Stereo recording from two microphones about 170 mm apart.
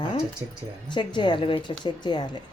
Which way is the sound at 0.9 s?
25° left (ahead or behind).